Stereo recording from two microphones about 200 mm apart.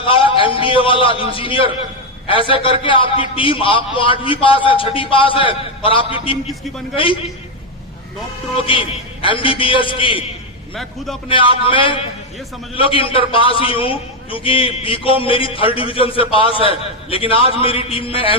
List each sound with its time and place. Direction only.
0.0 s a man's voice: 25° left (ahead or behind)
8.5 s a man's voice: 25° left (ahead or behind)
10.8 s a man's voice: centre (ahead or behind)
11.3 s a man's voice: 25° left (ahead or behind)